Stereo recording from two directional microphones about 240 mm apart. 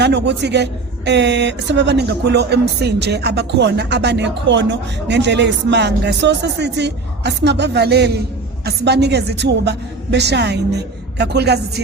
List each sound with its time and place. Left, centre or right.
0.0 s speech: right